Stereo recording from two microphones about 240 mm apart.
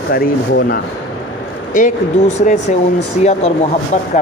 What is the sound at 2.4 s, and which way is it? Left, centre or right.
Speech, left.